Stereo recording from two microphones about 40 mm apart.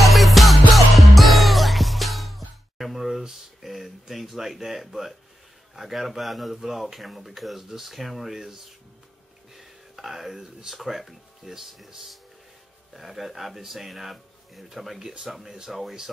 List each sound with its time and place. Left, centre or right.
0.0 s music: centre
5.8 s speech: centre
9.6 s a sound: centre
10.8 s speech: centre